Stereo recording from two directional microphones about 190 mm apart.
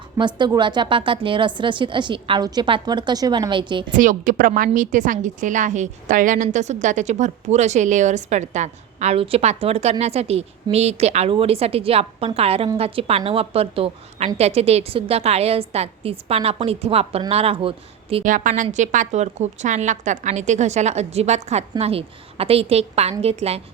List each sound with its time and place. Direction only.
0.2 s a woman's voice: 25° right (ahead or behind)
3.9 s a woman's voice: 45° right (ahead or behind)
18.2 s a woman's voice: 45° right (ahead or behind)